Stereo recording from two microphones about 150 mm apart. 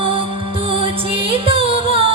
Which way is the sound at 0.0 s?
35° right (ahead or behind).